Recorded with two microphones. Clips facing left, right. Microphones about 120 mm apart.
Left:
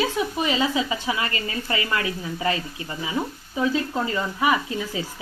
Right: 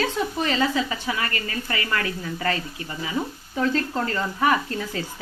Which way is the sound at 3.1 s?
10° left (ahead or behind).